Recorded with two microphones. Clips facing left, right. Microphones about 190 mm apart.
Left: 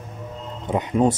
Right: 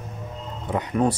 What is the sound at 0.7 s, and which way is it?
Speech, 25° left (ahead or behind).